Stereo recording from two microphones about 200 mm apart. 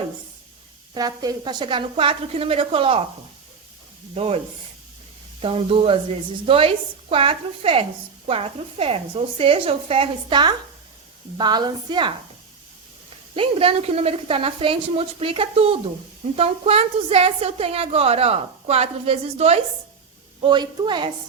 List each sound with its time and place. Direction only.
0.9 s a woman's voice: 20° right (ahead or behind)
4.1 s a woman's voice: 30° right (ahead or behind)
5.4 s a woman's voice: 30° right (ahead or behind)
13.3 s a woman's voice: 25° right (ahead or behind)